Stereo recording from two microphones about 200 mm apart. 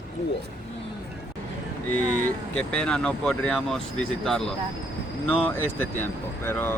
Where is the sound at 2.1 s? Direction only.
5° left (ahead or behind).